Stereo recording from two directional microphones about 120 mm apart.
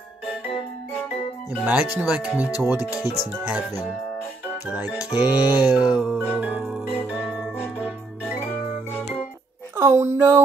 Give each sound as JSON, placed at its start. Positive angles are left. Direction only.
{"t": 1.5, "sound": "music", "side_deg": -10}
{"t": 4.6, "sound": "music", "side_deg": -10}
{"t": 9.8, "sound": "a sound", "side_deg": -20}